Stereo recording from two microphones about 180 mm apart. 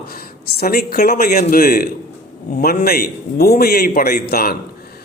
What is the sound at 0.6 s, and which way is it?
A man's voice, 60° left (ahead or behind).